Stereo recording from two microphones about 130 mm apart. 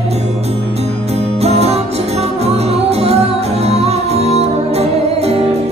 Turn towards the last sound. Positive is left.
turn(degrees=-55)  # may be behind; listen again after turning